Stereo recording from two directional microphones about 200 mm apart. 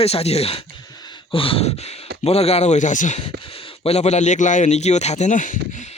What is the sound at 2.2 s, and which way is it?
A man's voice, 30° left (ahead or behind).